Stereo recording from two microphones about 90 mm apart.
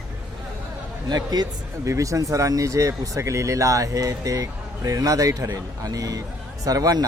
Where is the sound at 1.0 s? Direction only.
50° right (ahead or behind).